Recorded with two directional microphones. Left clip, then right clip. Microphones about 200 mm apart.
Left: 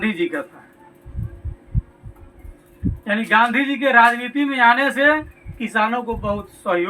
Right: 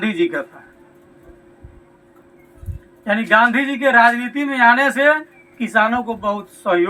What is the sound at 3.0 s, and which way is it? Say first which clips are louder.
Speech: right 3 dB; 35° right (ahead or behind).